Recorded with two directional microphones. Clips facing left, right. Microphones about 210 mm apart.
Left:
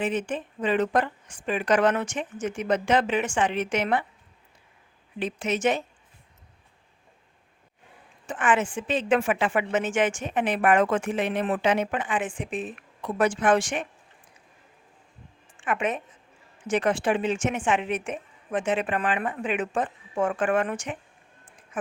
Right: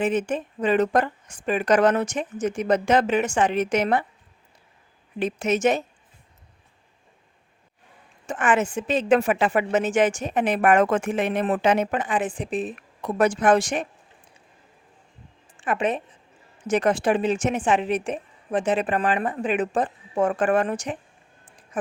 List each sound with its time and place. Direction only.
0.0 s a woman's voice: 45° right (ahead or behind)
5.2 s speech: 45° right (ahead or behind)
8.3 s a woman's voice: 45° right (ahead or behind)
15.5 s a woman's voice: 35° right (ahead or behind)